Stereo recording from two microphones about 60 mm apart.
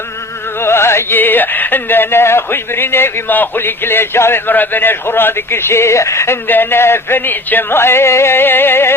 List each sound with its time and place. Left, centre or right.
0.6 s music: left
6.5 s music: left